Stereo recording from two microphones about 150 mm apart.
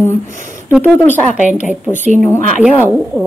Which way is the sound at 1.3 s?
55° right (ahead or behind).